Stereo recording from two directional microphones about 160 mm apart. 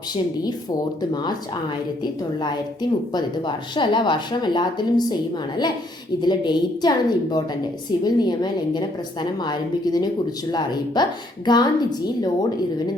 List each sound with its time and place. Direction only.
1.1 s speech: 25° left (ahead or behind)
3.1 s speech: 25° left (ahead or behind)
6.2 s speech: 25° left (ahead or behind)